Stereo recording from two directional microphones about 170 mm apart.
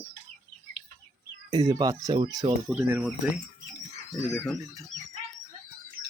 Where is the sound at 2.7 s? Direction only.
10° right (ahead or behind).